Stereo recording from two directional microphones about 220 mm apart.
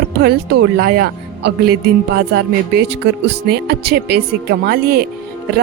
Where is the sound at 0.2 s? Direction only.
45° right (ahead or behind).